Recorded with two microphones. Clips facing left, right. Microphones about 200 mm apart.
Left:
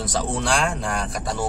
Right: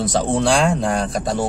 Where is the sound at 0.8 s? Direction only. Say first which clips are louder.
Right 7 dB; 35° right (ahead or behind).